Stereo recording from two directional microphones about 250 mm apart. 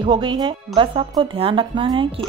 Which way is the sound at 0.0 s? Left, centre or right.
Centre.